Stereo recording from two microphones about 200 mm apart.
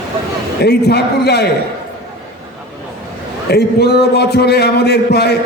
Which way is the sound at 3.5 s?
55° left (ahead or behind).